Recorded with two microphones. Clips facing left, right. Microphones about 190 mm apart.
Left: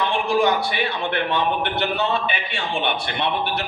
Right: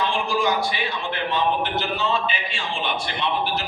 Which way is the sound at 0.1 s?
60° left (ahead or behind).